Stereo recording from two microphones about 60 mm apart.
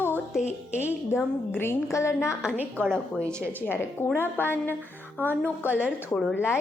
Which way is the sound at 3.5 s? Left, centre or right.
Left.